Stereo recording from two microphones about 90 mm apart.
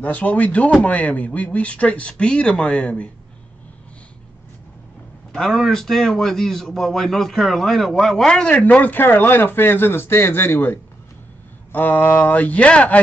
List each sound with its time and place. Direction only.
0.0 s speech: 15° left (ahead or behind)
5.3 s a man's voice: centre (ahead or behind)